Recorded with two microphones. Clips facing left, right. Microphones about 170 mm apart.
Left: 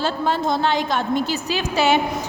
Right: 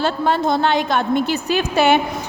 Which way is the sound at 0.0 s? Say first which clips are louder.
Right 3 dB; 60° right (ahead or behind).